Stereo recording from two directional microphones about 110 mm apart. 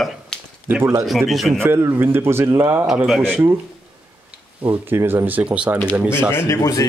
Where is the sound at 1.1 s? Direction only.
Centre (ahead or behind).